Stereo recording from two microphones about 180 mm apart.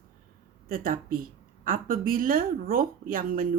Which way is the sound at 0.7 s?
55° right (ahead or behind).